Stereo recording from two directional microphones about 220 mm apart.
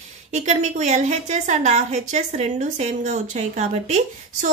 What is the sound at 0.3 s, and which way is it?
Speech, 30° right (ahead or behind).